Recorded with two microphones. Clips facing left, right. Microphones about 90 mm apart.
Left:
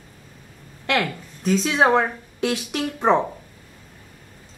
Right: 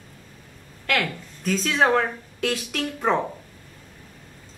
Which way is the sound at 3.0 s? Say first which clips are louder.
Left 4 dB; 20° left (ahead or behind).